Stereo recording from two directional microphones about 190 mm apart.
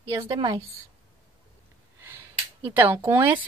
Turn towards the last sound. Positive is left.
turn(degrees=-10)  # may be behind; listen again after turning